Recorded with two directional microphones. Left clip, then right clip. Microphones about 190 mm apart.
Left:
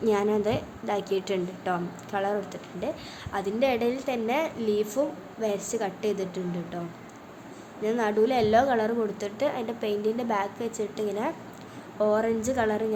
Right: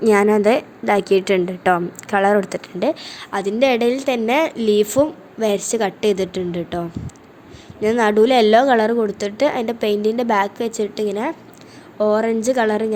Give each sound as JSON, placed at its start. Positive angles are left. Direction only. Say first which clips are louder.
{"t": 0.0, "sound": "a woman's voice", "louder": "right 11 dB", "side_deg": -35}